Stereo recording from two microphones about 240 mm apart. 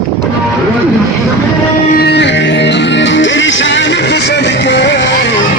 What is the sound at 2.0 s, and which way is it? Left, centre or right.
Music, left.